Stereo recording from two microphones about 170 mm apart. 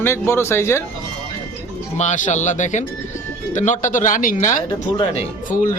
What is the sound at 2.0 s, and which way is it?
Speech, 45° left (ahead or behind).